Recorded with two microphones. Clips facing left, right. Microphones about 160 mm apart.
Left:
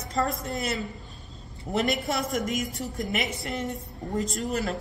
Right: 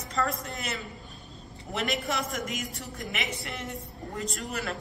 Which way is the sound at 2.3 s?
40° left (ahead or behind).